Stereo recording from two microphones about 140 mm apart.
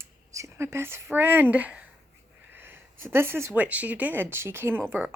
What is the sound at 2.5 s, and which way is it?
A woman's voice, 15° right (ahead or behind).